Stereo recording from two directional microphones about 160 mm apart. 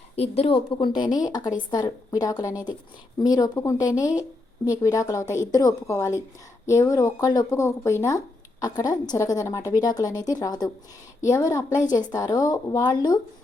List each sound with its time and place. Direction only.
0.2 s a woman's voice: 35° left (ahead or behind)